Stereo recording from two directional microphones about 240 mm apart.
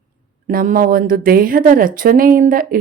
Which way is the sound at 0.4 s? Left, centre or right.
Right.